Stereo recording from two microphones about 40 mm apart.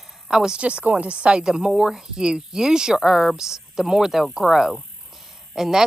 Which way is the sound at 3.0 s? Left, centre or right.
Centre.